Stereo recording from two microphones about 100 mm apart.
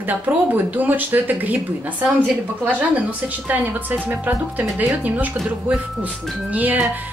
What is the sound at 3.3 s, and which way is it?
A woman's voice, 15° right (ahead or behind).